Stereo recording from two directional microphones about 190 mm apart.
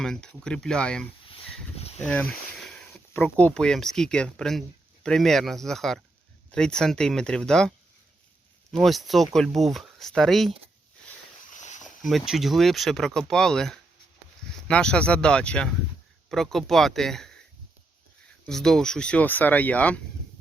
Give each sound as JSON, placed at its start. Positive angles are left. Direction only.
{"t": 0.0, "sound": "speech", "side_deg": 5}
{"t": 8.7, "sound": "speech", "side_deg": 0}
{"t": 11.5, "sound": "a sound", "side_deg": 40}
{"t": 11.8, "sound": "speech", "side_deg": 0}
{"t": 18.4, "sound": "speech", "side_deg": 5}